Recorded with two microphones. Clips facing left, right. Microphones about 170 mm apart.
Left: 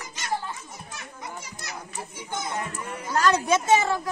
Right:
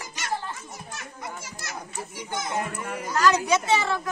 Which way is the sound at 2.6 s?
60° right (ahead or behind).